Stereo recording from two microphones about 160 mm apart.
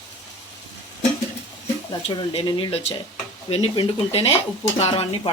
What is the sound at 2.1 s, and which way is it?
Speech, 30° left (ahead or behind).